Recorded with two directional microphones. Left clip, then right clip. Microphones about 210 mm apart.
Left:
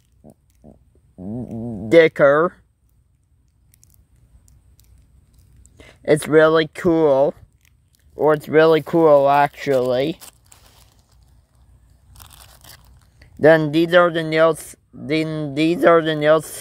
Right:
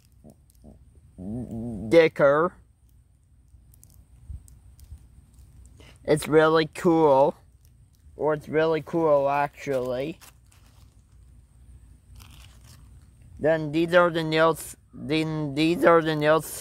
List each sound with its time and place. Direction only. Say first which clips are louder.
1.1 s a sound: left 5 dB; 35° left (ahead or behind)
1.9 s speech: left 6 dB; 20° left (ahead or behind)
5.8 s speech: left 6 dB; 15° left (ahead or behind)
8.2 s speech: left 9 dB; 35° left (ahead or behind)
12.1 s a sound: left 7 dB; 50° left (ahead or behind)
13.4 s speech: left 11 dB; 40° left (ahead or behind)
13.7 s speech: left 6 dB; 20° left (ahead or behind)